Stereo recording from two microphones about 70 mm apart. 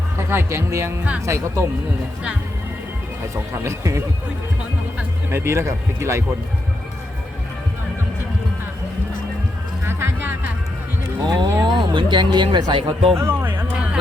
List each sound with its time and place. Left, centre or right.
0.2 s speech: right
3.5 s speech: right
5.3 s speech: right
9.8 s music: right
11.2 s speech: right
11.6 s speech: right
13.1 s speech: right